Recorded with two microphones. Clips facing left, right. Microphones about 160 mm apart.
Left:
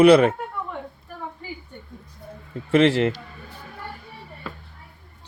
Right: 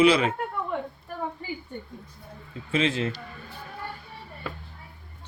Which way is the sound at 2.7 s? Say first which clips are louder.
Left 8 dB; 70° left (ahead or behind).